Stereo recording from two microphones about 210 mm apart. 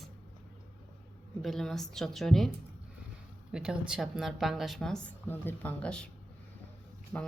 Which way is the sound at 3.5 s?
5° right (ahead or behind).